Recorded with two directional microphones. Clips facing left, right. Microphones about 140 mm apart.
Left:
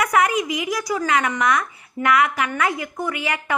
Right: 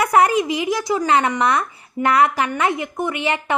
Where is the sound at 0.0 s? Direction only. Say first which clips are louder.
Right 4 dB; 30° right (ahead or behind).